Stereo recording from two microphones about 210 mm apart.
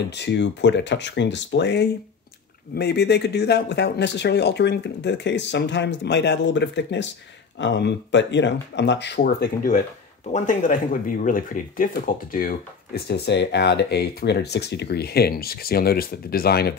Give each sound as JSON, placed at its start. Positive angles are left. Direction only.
{"t": 0.1, "sound": "speech", "side_deg": 55}